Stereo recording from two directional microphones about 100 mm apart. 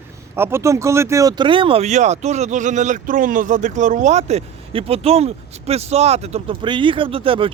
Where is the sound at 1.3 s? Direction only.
55° right (ahead or behind).